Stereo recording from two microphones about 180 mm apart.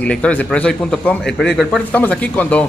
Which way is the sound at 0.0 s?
5° left (ahead or behind).